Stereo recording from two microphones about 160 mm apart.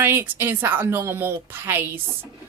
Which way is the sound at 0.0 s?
15° right (ahead or behind).